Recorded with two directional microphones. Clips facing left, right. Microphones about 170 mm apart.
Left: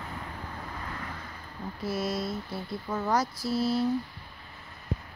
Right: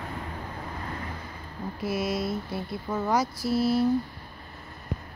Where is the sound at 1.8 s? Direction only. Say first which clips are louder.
Right 2 dB; 15° right (ahead or behind).